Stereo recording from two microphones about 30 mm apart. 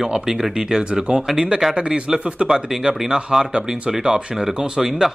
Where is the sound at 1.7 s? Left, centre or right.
Right.